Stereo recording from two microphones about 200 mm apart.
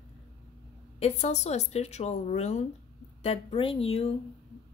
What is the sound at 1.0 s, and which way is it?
A woman's voice, 35° left (ahead or behind).